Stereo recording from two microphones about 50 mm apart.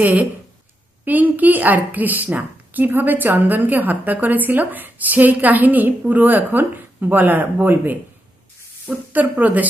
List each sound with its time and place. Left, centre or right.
0.0 s a woman's voice: right
9.1 s a woman's voice: right